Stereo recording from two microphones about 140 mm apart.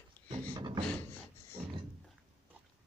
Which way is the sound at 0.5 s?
30° right (ahead or behind).